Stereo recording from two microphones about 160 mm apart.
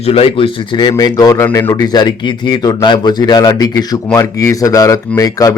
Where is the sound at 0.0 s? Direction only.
40° left (ahead or behind).